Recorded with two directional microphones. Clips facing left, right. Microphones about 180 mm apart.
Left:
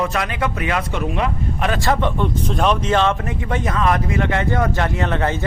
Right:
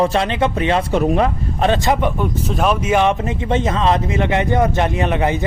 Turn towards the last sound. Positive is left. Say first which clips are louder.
# right 3 dB
turn(degrees=-15)  # may be behind; listen again after turning